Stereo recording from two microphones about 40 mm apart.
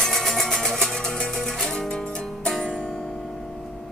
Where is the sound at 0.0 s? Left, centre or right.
Centre.